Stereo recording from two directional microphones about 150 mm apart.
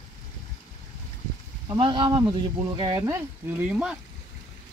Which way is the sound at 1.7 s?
35° right (ahead or behind).